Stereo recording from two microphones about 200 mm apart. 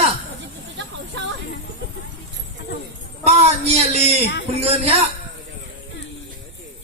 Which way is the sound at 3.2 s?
30° right (ahead or behind).